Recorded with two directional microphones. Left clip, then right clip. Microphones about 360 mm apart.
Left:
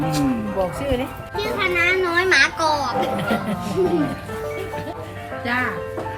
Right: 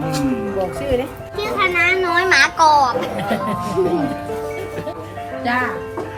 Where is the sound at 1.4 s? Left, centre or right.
Centre.